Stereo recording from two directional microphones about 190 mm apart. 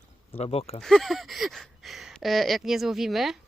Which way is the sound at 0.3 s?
30° left (ahead or behind).